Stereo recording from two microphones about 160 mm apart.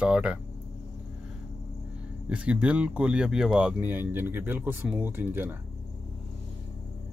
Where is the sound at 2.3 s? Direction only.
5° right (ahead or behind).